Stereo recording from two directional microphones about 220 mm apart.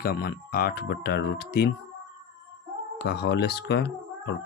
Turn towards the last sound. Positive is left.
turn(degrees=50)  # may be behind; listen again after turning